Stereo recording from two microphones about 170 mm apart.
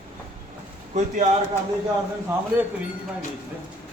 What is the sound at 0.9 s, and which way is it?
Speech, 45° right (ahead or behind).